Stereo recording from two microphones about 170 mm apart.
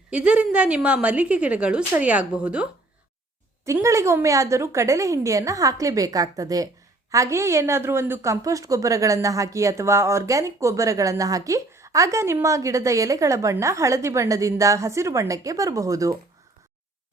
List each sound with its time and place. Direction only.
0.1 s speech: 5° right (ahead or behind)
3.7 s a woman's voice: 15° right (ahead or behind)